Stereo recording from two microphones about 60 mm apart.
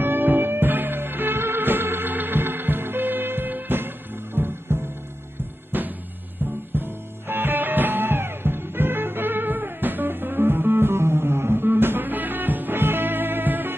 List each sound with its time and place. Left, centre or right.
0.0 s music: right
5.7 s music: right